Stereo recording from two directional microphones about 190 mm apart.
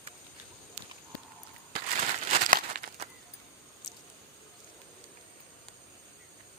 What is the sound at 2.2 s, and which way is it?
Crumpling, 45° right (ahead or behind).